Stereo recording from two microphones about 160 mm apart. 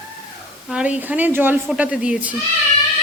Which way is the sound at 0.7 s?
10° right (ahead or behind).